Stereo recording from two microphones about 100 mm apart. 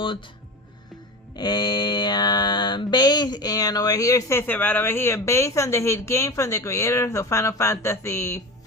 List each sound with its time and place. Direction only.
1.4 s mantra: 45° left (ahead or behind)